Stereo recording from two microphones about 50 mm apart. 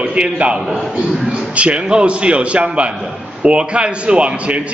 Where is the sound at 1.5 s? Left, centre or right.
Right.